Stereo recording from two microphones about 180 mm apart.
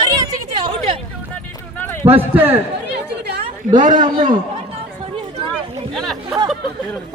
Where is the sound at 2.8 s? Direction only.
65° right (ahead or behind).